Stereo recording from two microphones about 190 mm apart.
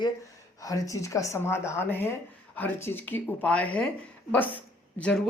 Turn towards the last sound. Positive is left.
turn(degrees=5)  # may be behind; listen again after turning